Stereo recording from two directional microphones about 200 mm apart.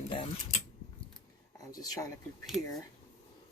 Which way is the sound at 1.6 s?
20° left (ahead or behind).